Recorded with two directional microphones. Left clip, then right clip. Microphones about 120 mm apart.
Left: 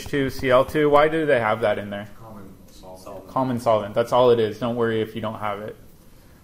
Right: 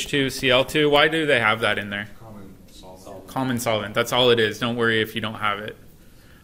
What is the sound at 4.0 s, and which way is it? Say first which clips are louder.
Speech: even; 55° right (ahead or behind).